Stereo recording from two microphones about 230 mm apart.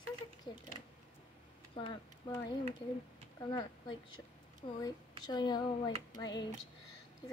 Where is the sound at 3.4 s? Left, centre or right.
Centre.